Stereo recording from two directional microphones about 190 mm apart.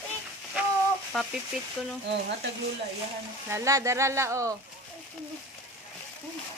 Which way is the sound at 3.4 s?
15° right (ahead or behind).